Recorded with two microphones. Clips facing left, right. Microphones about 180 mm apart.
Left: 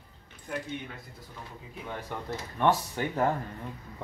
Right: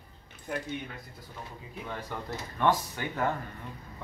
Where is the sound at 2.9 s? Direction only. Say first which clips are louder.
Left 4 dB; 30° left (ahead or behind).